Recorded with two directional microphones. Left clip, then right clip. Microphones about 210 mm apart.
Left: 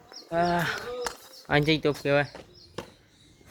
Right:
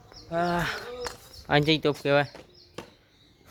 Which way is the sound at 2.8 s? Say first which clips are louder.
Left 3 dB; 45° right (ahead or behind).